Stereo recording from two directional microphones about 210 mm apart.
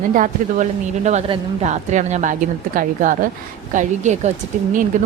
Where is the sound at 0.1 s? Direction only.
40° right (ahead or behind).